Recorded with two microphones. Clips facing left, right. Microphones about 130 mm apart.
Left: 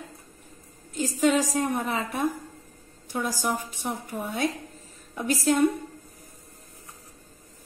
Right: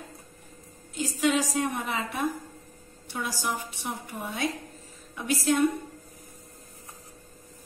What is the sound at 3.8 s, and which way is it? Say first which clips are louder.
A woman's voice: left 3 dB; 45° left (ahead or behind).